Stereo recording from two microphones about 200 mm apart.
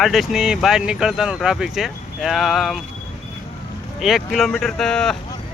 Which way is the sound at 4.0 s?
Centre (ahead or behind).